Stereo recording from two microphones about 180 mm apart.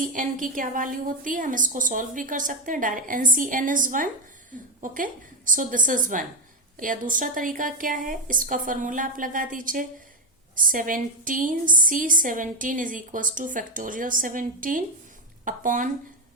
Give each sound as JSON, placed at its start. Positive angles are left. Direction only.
{"t": 0.0, "sound": "speech", "side_deg": -50}